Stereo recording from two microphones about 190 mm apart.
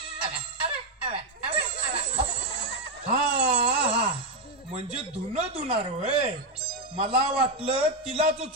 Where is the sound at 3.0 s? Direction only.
30° right (ahead or behind).